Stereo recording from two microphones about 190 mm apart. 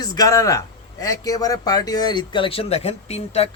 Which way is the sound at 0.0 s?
20° left (ahead or behind).